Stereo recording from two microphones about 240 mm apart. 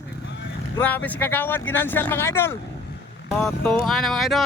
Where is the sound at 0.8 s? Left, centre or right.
Centre.